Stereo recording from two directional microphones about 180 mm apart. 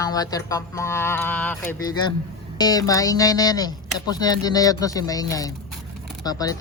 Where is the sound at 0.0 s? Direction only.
20° left (ahead or behind).